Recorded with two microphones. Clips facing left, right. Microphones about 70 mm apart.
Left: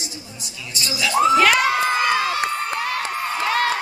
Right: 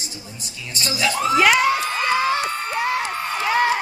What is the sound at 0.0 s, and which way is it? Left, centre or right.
A woman's voice, right.